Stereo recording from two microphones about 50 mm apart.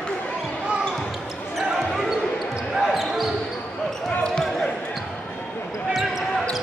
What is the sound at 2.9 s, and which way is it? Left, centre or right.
Basketball bounce, centre.